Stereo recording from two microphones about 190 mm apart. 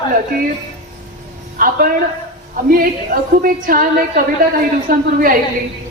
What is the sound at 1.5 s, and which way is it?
Speech, 50° right (ahead or behind).